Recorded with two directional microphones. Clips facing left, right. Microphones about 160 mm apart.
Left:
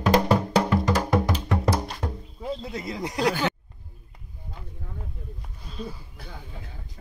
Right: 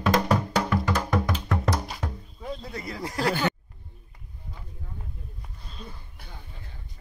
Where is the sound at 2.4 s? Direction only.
20° left (ahead or behind).